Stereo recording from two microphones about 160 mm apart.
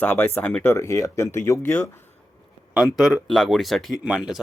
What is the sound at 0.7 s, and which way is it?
Speech, 20° left (ahead or behind).